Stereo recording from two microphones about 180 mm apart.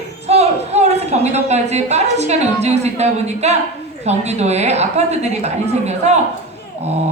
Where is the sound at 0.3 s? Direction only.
35° right (ahead or behind).